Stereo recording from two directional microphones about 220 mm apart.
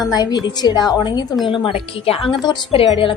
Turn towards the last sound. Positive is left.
turn(degrees=25)  # may be behind; listen again after turning